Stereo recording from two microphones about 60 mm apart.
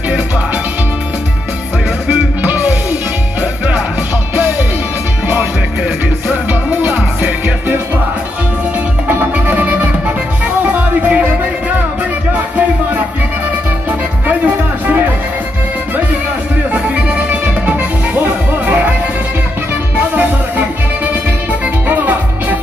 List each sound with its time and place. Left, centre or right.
2.0 s music: right
4.4 s music: right
6.8 s music: right
9.0 s music: right
14.2 s music: right
16.7 s music: right
20.2 s music: right